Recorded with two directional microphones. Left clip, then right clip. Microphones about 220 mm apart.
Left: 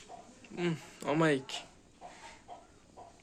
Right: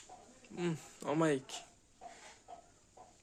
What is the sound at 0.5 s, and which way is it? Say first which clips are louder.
Speech: left 4 dB; 20° right (ahead or behind).